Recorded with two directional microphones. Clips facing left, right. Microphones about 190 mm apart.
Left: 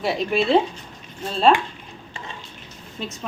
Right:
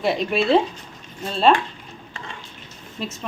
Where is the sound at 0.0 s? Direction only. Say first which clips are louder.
Right 1 dB; centre (ahead or behind).